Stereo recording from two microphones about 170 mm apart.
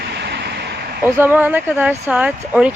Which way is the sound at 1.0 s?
10° right (ahead or behind).